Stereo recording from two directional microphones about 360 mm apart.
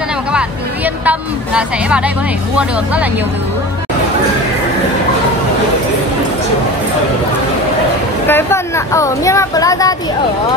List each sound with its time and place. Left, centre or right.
0.3 s speech: centre
8.3 s speech: centre